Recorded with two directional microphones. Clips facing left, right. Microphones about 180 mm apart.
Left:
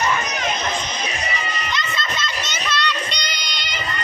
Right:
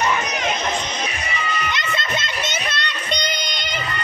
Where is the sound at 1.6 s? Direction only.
55° right (ahead or behind).